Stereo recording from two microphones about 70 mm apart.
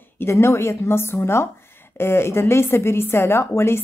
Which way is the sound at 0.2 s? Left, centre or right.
Left.